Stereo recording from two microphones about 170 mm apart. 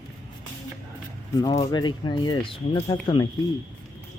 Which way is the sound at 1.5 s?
30° left (ahead or behind).